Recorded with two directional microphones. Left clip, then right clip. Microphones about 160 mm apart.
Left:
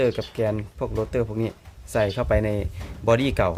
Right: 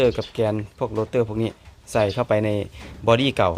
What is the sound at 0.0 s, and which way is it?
Speech, 15° right (ahead or behind).